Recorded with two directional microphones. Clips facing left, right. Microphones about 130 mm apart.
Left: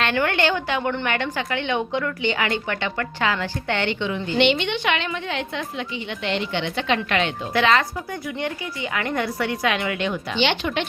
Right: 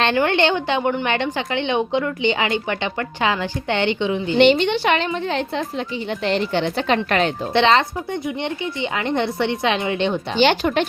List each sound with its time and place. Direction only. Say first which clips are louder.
0.0 s speech: right 4 dB; 25° right (ahead or behind)
4.4 s a woman's voice: right 6 dB; 40° right (ahead or behind)
7.5 s speech: right 3 dB; 25° right (ahead or behind)
10.3 s speech: right 6 dB; 40° right (ahead or behind)